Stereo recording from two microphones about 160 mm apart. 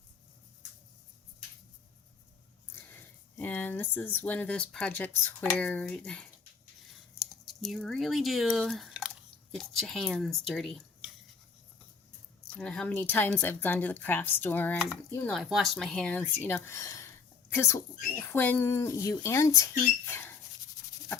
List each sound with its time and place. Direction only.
2.9 s a woman's voice: 10° left (ahead or behind)
7.6 s speech: centre (ahead or behind)
12.5 s a woman's voice: 5° left (ahead or behind)
15.3 s a woman's voice: centre (ahead or behind); by 20.3 s 15° left (ahead or behind)